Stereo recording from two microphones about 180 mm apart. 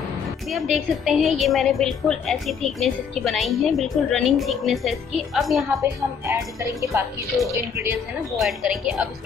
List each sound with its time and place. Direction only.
0.5 s a woman's voice: centre (ahead or behind)
5.8 s a woman's voice: 15° right (ahead or behind)
8.4 s a woman's voice: centre (ahead or behind)